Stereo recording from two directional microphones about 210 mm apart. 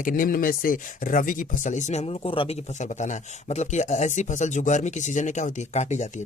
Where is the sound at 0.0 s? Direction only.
40° left (ahead or behind).